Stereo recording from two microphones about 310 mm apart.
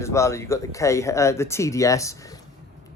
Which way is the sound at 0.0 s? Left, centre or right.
Centre.